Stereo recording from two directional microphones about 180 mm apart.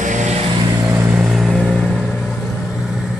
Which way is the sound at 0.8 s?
10° right (ahead or behind).